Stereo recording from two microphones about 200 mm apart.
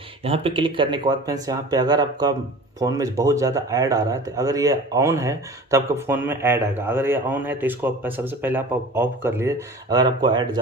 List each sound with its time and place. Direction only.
0.2 s speech: 30° right (ahead or behind)